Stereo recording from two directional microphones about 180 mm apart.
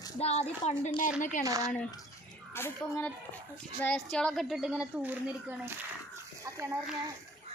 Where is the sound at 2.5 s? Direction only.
15° left (ahead or behind); by 5.5 s 10° right (ahead or behind).